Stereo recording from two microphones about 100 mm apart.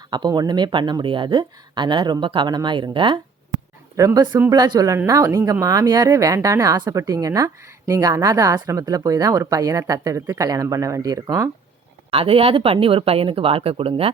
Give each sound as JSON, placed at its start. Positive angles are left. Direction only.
{"t": 0.1, "sound": "speech", "side_deg": -45}
{"t": 3.9, "sound": "speech", "side_deg": -35}
{"t": 12.1, "sound": "speech", "side_deg": -70}